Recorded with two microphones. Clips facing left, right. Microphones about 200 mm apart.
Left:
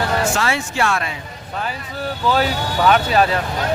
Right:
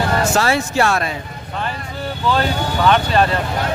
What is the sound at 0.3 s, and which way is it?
Speech, 40° right (ahead or behind).